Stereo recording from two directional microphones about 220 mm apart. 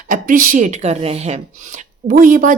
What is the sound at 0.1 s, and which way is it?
A woman's voice, 40° right (ahead or behind).